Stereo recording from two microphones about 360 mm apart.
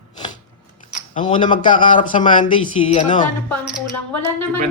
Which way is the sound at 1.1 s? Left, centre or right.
Left.